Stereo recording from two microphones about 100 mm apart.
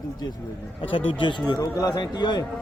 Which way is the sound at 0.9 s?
60° left (ahead or behind).